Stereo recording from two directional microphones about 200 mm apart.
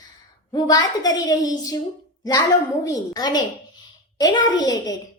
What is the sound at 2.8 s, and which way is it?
A child's voice, 15° left (ahead or behind).